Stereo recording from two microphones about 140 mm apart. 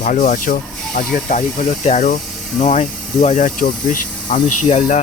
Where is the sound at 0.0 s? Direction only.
65° left (ahead or behind).